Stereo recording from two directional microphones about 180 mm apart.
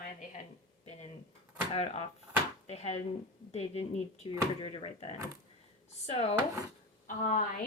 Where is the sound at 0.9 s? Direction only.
35° left (ahead or behind).